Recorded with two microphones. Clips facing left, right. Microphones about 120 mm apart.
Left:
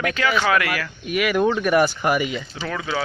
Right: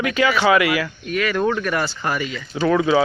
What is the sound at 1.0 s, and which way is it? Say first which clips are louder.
Speech: left 2 dB; 10° left (ahead or behind).